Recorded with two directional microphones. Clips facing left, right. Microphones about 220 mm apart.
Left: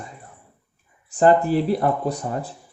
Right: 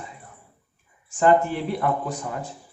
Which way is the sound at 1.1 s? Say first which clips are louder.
Left 3 dB; 35° left (ahead or behind).